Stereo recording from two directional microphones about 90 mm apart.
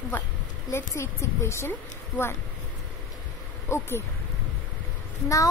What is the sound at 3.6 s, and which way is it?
Speech, 30° left (ahead or behind).